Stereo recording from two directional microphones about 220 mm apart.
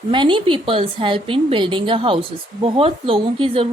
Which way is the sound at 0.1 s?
20° right (ahead or behind).